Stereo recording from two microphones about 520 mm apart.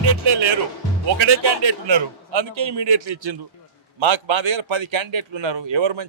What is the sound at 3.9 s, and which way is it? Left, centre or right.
A man's voice, right.